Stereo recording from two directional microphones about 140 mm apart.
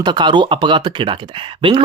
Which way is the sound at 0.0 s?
30° right (ahead or behind).